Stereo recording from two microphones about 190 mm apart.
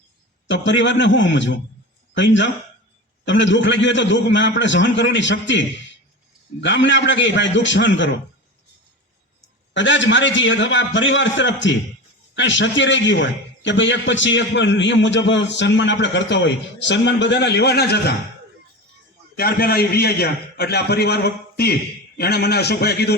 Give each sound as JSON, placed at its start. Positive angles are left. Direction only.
{"t": 0.4, "sound": "a man's voice", "side_deg": 70}
{"t": 9.7, "sound": "a man's voice", "side_deg": 75}
{"t": 19.4, "sound": "a man's voice", "side_deg": 55}